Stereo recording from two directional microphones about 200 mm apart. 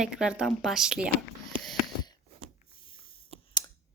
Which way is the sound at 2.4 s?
80° right.